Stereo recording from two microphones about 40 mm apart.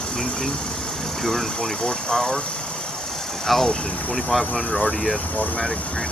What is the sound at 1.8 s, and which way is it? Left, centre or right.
Speech, centre.